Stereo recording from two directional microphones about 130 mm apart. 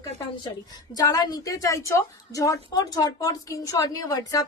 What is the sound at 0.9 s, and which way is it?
A woman's voice, 30° left (ahead or behind).